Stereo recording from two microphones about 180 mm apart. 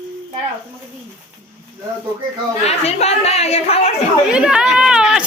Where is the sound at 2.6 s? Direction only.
35° left (ahead or behind).